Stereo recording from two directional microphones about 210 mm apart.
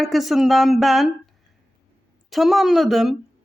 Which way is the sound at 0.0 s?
Centre (ahead or behind).